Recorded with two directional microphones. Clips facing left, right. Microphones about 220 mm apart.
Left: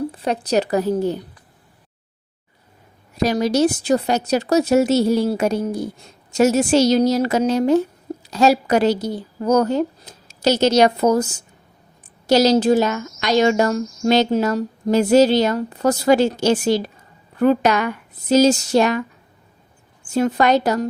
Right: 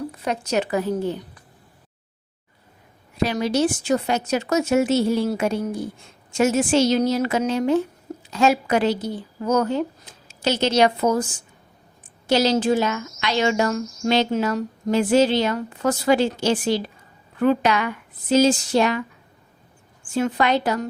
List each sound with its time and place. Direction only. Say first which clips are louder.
0.1 s a woman's voice: left 4 dB; 30° left (ahead or behind)
3.2 s a woman's voice: left 4 dB; 40° left (ahead or behind)
12.3 s a woman's voice: left 4 dB; 40° left (ahead or behind)
20.1 s a woman's voice: left 4 dB; 40° left (ahead or behind)